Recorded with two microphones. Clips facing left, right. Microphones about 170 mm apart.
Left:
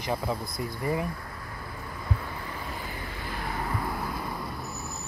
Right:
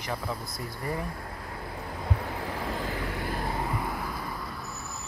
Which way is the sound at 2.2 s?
80° right.